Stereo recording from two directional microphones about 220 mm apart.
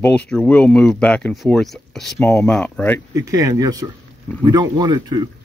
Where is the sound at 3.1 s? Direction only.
15° right (ahead or behind).